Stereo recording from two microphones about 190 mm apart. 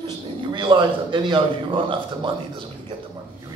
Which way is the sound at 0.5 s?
25° right (ahead or behind).